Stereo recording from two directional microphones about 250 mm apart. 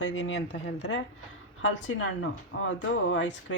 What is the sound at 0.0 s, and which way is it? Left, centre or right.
Speech, left.